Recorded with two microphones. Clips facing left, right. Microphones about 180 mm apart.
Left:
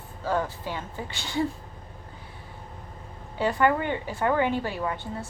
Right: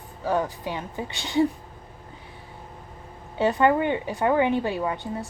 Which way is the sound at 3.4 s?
20° right (ahead or behind).